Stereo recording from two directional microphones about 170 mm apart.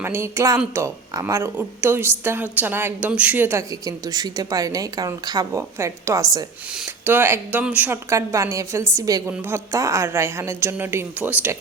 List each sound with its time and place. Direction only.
0.0 s a woman's voice: 15° right (ahead or behind)